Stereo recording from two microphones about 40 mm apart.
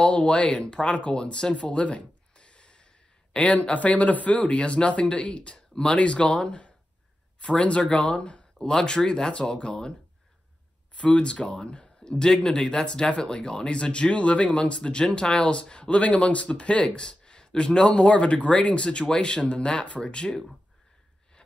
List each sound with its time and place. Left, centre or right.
0.0 s a man's voice: left
11.0 s speech: left
12.1 s speech: centre